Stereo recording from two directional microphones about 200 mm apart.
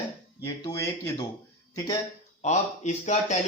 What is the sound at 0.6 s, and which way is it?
Speech, 15° left (ahead or behind).